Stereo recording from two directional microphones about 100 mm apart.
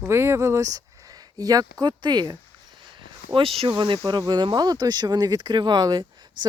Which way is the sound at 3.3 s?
70° right (ahead or behind).